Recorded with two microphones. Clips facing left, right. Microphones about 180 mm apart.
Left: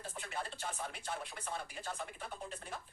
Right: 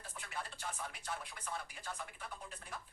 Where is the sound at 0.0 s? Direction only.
25° left (ahead or behind).